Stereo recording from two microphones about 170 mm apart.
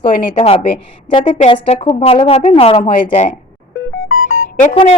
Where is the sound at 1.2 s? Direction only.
45° left (ahead or behind).